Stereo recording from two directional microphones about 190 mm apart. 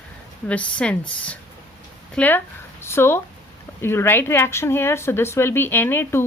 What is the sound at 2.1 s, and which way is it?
A woman's voice, 10° left (ahead or behind).